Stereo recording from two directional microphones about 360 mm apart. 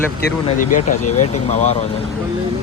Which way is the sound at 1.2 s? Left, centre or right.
Centre.